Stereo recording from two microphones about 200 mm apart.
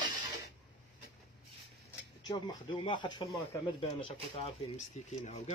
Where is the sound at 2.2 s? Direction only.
20° left (ahead or behind).